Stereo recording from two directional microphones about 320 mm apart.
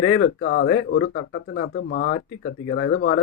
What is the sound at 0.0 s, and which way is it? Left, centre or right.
Speech, left.